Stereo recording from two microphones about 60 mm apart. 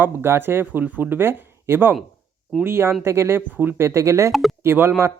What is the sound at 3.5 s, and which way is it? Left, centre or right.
Speech, right.